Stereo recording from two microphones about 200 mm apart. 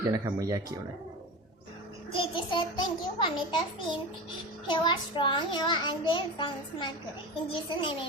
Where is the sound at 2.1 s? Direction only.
25° left (ahead or behind).